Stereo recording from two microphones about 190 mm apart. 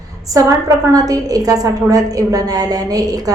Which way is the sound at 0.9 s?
20° right (ahead or behind).